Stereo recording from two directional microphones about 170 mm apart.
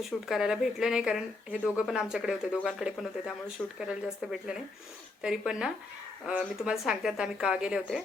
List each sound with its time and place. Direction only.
0.0 s speech: centre (ahead or behind)